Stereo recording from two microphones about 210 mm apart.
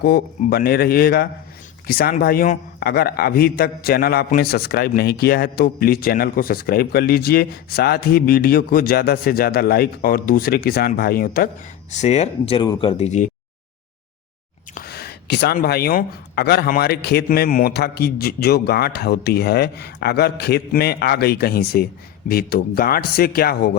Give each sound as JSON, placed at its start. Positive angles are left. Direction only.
{"t": 0.0, "sound": "speech", "side_deg": 50}
{"t": 11.9, "sound": "speech", "side_deg": 35}
{"t": 14.8, "sound": "speech", "side_deg": 50}